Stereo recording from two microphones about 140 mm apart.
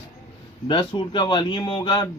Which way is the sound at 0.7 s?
35° left (ahead or behind).